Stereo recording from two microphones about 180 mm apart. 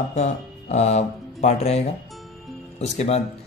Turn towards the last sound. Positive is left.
turn(degrees=35)  # may be behind; listen again after turning